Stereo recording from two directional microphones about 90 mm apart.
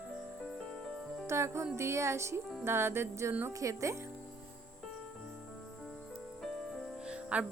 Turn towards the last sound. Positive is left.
turn(degrees=-10)  # may be behind; listen again after turning